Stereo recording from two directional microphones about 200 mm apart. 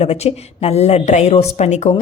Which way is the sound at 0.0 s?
30° left (ahead or behind).